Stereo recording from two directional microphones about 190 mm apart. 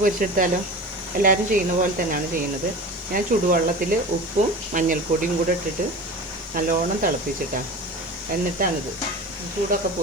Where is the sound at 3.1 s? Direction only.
50° right (ahead or behind).